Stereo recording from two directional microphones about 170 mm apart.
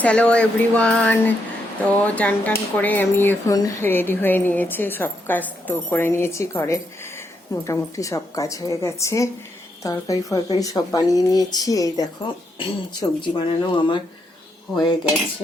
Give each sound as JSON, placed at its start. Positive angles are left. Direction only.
{"t": 0.0, "sound": "a woman's voice", "side_deg": 5}